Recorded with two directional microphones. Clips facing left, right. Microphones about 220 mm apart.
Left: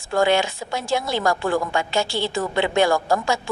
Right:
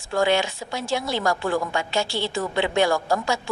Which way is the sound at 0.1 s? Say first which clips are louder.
Left 2 dB; 50° left (ahead or behind).